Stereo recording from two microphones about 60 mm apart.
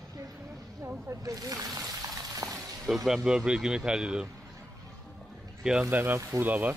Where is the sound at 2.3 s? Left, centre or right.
Right.